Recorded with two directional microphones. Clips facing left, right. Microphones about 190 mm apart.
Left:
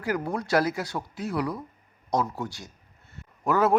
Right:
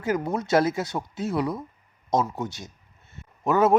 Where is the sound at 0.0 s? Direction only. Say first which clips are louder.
Right 3 dB; 20° right (ahead or behind).